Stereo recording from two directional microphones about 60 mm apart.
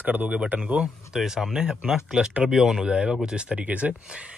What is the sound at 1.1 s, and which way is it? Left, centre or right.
Speech, centre.